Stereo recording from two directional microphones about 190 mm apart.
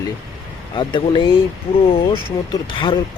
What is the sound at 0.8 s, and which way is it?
Speech, 25° left (ahead or behind).